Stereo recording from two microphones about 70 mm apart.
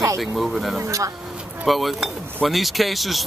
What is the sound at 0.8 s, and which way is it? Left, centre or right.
Speech, right.